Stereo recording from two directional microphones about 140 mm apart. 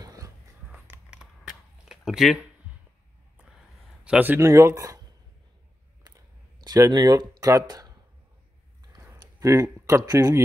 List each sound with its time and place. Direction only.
0.0 s biting: 25° right (ahead or behind)
0.7 s a sound: 10° right (ahead or behind)
1.9 s speech: centre (ahead or behind)
4.0 s speech: 10° right (ahead or behind)
6.0 s a sound: 25° right (ahead or behind)
8.9 s speech: 25° right (ahead or behind)